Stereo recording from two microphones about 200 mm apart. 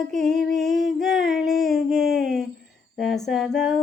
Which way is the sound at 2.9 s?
Centre (ahead or behind).